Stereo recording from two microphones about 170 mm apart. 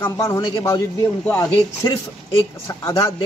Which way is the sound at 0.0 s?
15° left (ahead or behind).